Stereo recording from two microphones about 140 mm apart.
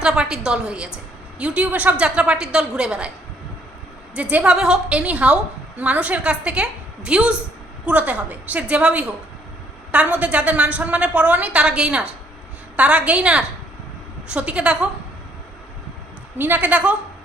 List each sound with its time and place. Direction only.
0.0 s a woman's voice: 5° right (ahead or behind)
4.1 s a woman's voice: 10° right (ahead or behind)
16.4 s a woman's voice: 10° right (ahead or behind)